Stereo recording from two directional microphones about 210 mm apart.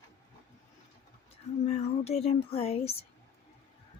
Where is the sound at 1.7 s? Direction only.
30° left (ahead or behind).